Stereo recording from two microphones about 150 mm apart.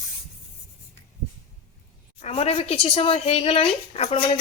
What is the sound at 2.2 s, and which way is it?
A woman's voice, 45° left (ahead or behind).